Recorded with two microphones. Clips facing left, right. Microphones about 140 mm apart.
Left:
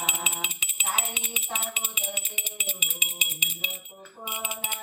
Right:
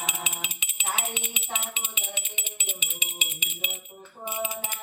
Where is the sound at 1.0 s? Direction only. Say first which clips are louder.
Right 1 dB; 35° left (ahead or behind).